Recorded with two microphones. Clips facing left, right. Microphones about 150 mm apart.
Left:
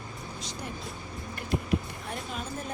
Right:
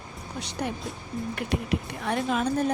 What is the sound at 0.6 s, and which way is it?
Speech, 70° right (ahead or behind).